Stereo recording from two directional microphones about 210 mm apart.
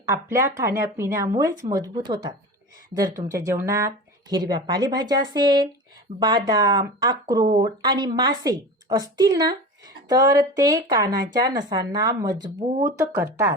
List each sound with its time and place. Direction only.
0.1 s speech: 15° right (ahead or behind)